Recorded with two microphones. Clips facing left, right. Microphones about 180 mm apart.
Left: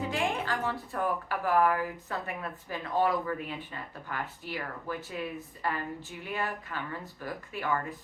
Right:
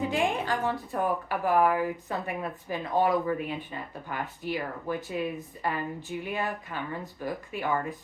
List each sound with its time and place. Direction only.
0.1 s speech: 20° right (ahead or behind)